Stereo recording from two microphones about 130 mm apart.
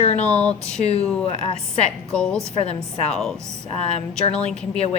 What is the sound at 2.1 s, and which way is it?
A woman's voice, 5° left (ahead or behind).